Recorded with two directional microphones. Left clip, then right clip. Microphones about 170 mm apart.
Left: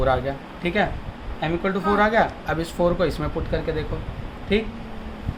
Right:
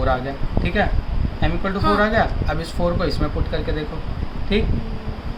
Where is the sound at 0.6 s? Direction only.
30° left (ahead or behind).